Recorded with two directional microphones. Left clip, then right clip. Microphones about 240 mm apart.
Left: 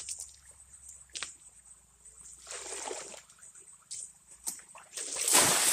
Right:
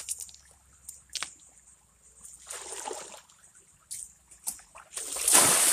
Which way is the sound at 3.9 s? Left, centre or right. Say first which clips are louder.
Right 1 dB; centre.